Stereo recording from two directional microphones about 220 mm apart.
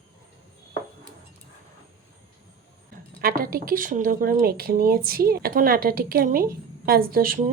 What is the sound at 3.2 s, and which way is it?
Speech, 40° right (ahead or behind).